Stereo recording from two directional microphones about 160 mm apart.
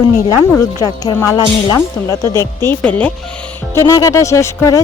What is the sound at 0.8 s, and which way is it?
Speech, 20° left (ahead or behind).